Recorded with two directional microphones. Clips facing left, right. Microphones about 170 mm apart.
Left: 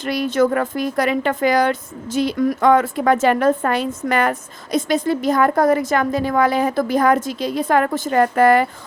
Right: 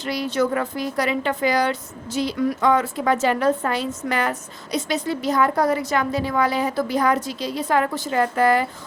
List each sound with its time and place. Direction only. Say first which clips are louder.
0.0 s a woman's voice: left 5 dB; 55° left (ahead or behind)